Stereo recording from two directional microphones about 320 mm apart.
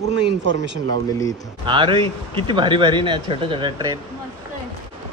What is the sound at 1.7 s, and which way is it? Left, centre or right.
Speech, centre.